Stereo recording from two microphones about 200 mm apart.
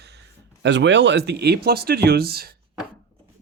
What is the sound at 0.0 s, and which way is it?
Speech, 60° right (ahead or behind).